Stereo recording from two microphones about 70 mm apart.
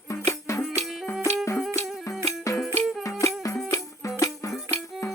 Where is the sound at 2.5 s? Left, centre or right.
Left.